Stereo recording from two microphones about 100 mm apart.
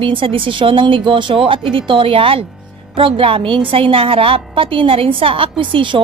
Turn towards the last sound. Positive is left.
turn(degrees=-55)  # may be behind; listen again after turning